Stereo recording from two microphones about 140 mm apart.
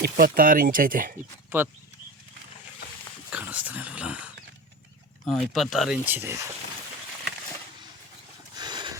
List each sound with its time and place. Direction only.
0.2 s speech: 90° right
1.5 s speech: 15° right (ahead or behind)
3.2 s speech: 10° right (ahead or behind)
6.1 s speech: 15° right (ahead or behind)
8.5 s a sound: 30° right (ahead or behind)